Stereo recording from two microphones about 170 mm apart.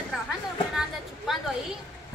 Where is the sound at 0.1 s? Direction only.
5° right (ahead or behind).